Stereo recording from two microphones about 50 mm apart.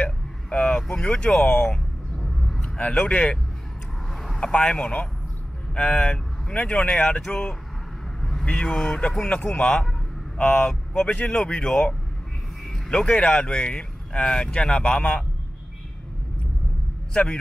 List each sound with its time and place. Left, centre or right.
0.0 s vehicle: left
0.7 s speech: centre
2.1 s a sound: centre
2.8 s speech: left
4.1 s vehicle: centre
4.4 s speech: centre
7.0 s speech: centre
10.4 s speech: centre
11.1 s speech: left
12.6 s vehicle: centre
13.3 s speech: left